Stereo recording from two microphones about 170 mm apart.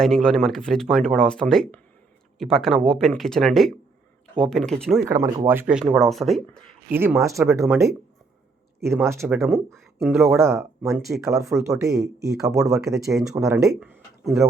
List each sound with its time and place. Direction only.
0.0 s speech: 5° left (ahead or behind)
5.0 s speech: 20° right (ahead or behind)
5.8 s speech: centre (ahead or behind)
6.8 s speech: 10° right (ahead or behind)
9.6 s speech: centre (ahead or behind)
10.3 s speech: 15° right (ahead or behind)
10.9 s speech: centre (ahead or behind)
11.3 s speech: 20° right (ahead or behind)